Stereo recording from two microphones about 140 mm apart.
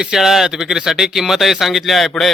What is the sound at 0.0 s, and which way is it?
Speech, 5° right (ahead or behind).